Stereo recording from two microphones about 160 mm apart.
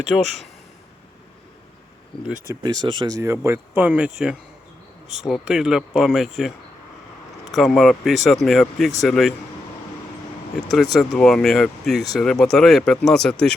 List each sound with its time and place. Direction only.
0.1 s speech: 10° left (ahead or behind)
2.6 s speech: 25° right (ahead or behind); by 6.5 s centre (ahead or behind)
7.5 s speech: centre (ahead or behind)
10.9 s speech: 5° left (ahead or behind)